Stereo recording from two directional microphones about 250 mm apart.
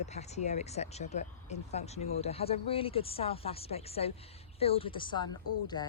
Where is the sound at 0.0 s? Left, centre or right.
Left.